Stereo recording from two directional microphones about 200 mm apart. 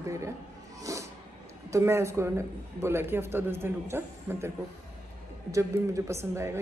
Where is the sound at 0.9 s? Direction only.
15° right (ahead or behind).